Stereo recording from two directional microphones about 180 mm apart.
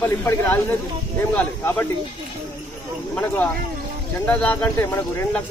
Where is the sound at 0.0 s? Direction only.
10° left (ahead or behind).